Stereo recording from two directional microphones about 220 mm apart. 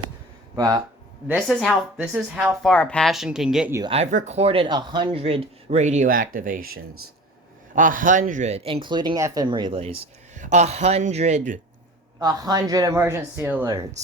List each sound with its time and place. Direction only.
0.5 s speech: 15° right (ahead or behind)
1.3 s a woman's voice: centre (ahead or behind)
3.8 s a man's voice: 25° right (ahead or behind)
12.2 s speech: 15° right (ahead or behind)